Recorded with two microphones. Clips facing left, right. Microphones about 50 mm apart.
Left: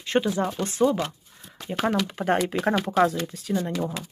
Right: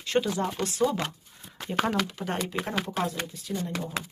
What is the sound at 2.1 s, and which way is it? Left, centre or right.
Speech, left.